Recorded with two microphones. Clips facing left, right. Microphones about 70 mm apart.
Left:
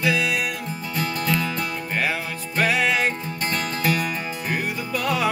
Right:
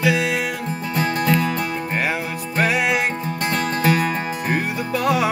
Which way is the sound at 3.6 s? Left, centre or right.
Right.